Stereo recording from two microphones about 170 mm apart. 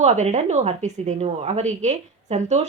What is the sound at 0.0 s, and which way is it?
A woman's voice, 40° right (ahead or behind).